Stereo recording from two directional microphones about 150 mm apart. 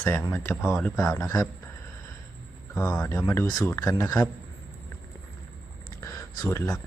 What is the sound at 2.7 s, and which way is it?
Speech, 10° left (ahead or behind).